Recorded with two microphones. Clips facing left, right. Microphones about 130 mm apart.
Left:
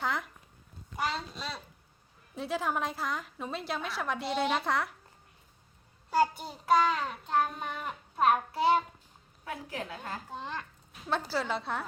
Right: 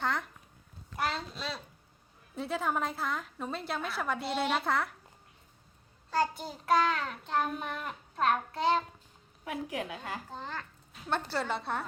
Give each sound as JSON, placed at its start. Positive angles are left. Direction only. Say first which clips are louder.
{"t": 0.0, "sound": "speech", "louder": "even", "side_deg": 0}
{"t": 0.9, "sound": "a sound", "louder": "even", "side_deg": 0}
{"t": 2.3, "sound": "child singing", "louder": "even", "side_deg": 0}
{"t": 6.1, "sound": "child singing", "louder": "left 3 dB", "side_deg": 5}
{"t": 9.4, "sound": "a woman's voice", "louder": "right 3 dB", "side_deg": -15}
{"t": 10.2, "sound": "speech", "louder": "left 2 dB", "side_deg": 15}
{"t": 11.1, "sound": "child singing", "louder": "left 1 dB", "side_deg": 0}